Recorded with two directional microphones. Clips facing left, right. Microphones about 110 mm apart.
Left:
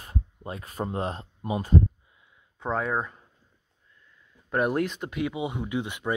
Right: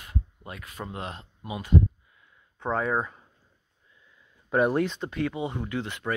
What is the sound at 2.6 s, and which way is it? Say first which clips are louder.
Speech: right 1 dB; centre (ahead or behind).